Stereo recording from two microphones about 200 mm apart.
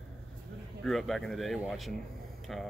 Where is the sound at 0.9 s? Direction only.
Centre (ahead or behind).